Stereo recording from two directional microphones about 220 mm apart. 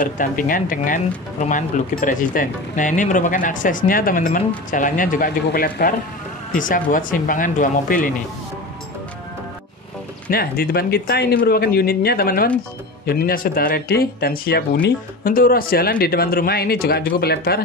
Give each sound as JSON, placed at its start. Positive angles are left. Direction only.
{"t": 0.0, "sound": "speech", "side_deg": 40}
{"t": 10.3, "sound": "speech", "side_deg": 45}